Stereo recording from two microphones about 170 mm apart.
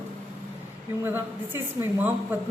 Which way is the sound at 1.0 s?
15° right (ahead or behind).